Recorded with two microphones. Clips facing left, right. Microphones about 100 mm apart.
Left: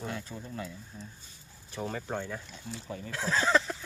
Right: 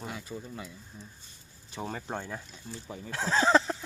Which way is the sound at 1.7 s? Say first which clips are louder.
Left 1 dB; 20° right (ahead or behind).